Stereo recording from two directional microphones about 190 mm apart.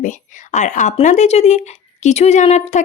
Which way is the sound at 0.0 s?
40° left (ahead or behind).